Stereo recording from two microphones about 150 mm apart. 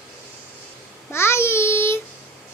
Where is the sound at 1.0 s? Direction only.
15° left (ahead or behind).